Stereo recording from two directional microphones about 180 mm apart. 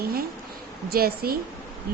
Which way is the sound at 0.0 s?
55° right (ahead or behind).